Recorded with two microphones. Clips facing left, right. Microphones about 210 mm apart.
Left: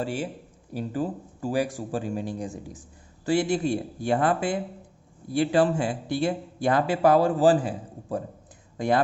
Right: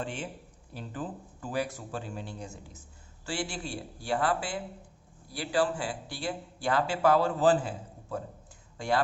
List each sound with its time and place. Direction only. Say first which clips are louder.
0.0 s a man's voice: left 7 dB; 10° left (ahead or behind)